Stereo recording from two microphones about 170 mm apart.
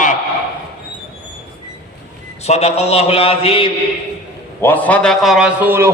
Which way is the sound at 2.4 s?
40° left (ahead or behind).